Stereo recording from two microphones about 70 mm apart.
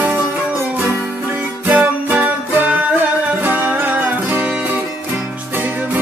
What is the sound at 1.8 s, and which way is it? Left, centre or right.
Music, right.